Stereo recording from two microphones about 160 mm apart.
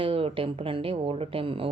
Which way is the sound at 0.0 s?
35° right (ahead or behind).